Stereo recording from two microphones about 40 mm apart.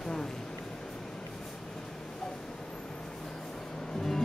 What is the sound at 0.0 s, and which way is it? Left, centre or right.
Boat, centre.